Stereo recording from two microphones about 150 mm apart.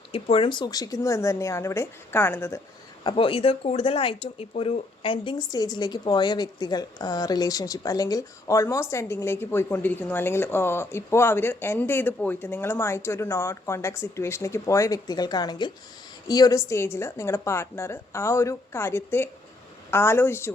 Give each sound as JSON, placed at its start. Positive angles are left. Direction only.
{"t": 0.1, "sound": "speech", "side_deg": 40}
{"t": 3.0, "sound": "a woman's voice", "side_deg": 35}